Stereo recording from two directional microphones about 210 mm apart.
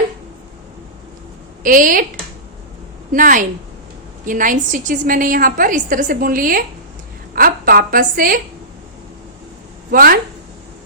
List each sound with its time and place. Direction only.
1.6 s a woman's voice: 40° right (ahead or behind)
3.1 s a woman's voice: 40° right (ahead or behind)
9.9 s a woman's voice: 45° right (ahead or behind)